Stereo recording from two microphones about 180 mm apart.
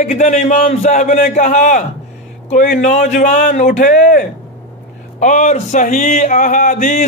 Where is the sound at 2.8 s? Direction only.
45° left (ahead or behind).